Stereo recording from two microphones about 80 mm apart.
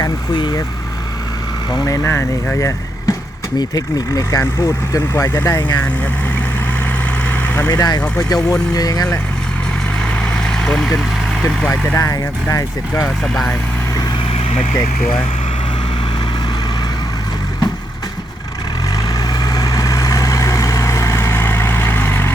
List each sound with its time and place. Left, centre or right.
1.7 s speech: left
2.6 s vehicle: left
3.6 s speech: left
4.2 s speech: left
5.5 s speech: left
7.3 s vehicle: centre
7.7 s speech: left
10.2 s vehicle: centre
11.9 s speech: left
19.0 s vehicle: left